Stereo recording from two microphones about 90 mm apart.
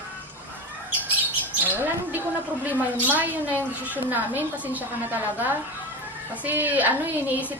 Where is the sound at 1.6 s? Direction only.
20° right (ahead or behind).